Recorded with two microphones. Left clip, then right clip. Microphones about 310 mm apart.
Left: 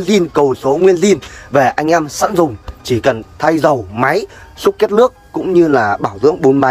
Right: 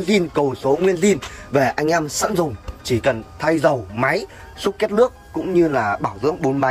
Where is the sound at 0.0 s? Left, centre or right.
Centre.